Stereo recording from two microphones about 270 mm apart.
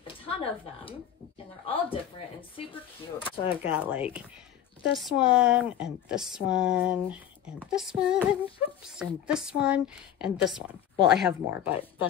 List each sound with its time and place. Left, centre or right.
0.0 s a sound: centre
1.7 s speech: centre
3.6 s speech: centre